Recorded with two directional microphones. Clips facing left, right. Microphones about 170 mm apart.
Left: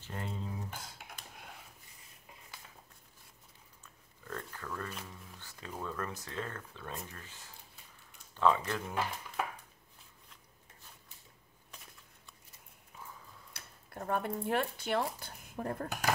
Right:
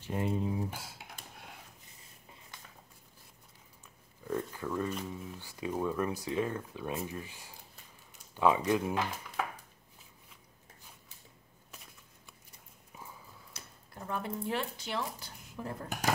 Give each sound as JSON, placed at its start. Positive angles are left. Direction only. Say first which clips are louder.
{"t": 0.0, "sound": "speech", "louder": "right 9 dB", "side_deg": -15}
{"t": 3.8, "sound": "pig", "louder": "right 8 dB", "side_deg": -10}
{"t": 5.0, "sound": "speech", "louder": "right 9 dB", "side_deg": -10}
{"t": 13.5, "sound": "speech", "louder": "even", "side_deg": 55}